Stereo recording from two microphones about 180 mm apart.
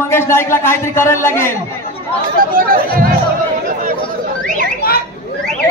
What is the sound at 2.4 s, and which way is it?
Speech, 50° right (ahead or behind).